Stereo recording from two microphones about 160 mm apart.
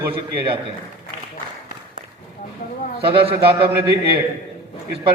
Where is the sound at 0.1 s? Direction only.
35° right (ahead or behind).